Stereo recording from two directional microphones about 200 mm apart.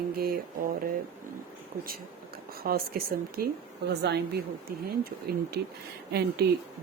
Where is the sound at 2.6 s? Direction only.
50° right (ahead or behind).